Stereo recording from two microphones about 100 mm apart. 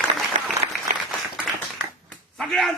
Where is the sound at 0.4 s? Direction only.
90° right.